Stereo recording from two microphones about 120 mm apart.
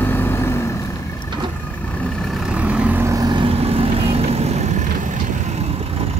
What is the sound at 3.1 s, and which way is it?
Vehicle, 35° right (ahead or behind).